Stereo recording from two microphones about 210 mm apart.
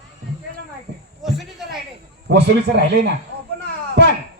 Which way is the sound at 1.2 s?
Centre (ahead or behind).